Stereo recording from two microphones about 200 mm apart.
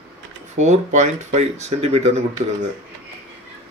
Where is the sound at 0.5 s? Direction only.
35° right (ahead or behind).